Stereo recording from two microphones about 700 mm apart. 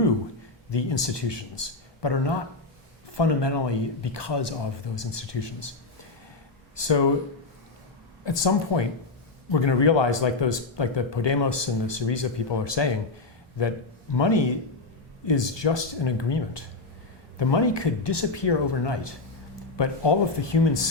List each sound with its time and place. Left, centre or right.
0.7 s speech: left
6.7 s speech: left
8.2 s speech: left